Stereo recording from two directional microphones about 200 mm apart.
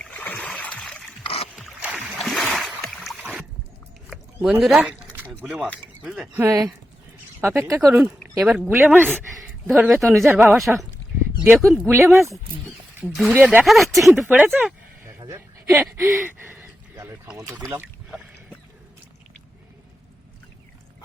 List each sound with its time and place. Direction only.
0.0 s a sound: 5° left (ahead or behind)
1.2 s boat: 30° left (ahead or behind)
1.5 s rowboat: 5° right (ahead or behind)
4.1 s a sound: 5° right (ahead or behind)
5.4 s speech: 5° right (ahead or behind)
7.9 s speech: 5° right (ahead or behind)
9.1 s speech: centre (ahead or behind)
15.2 s a sound: 15° right (ahead or behind)
15.7 s speech: centre (ahead or behind)
17.7 s boat: 10° right (ahead or behind)